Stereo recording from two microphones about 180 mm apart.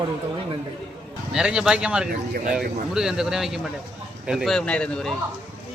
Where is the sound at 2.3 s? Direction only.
50° right (ahead or behind).